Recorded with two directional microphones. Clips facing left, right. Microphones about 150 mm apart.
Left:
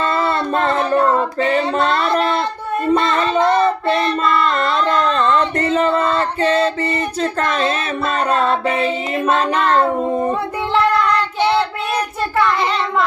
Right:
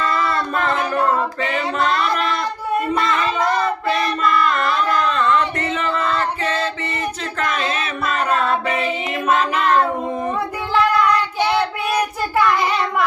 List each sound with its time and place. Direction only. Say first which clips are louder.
0.0 s singing: left 2 dB; 30° left (ahead or behind)
2.9 s child singing: left 4 dB; 25° left (ahead or behind)
7.2 s a sound: left 6 dB; 35° left (ahead or behind)